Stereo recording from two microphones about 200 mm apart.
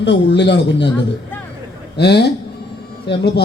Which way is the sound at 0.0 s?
60° left (ahead or behind).